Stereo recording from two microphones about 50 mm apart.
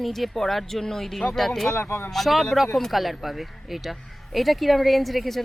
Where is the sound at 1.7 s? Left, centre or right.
Left.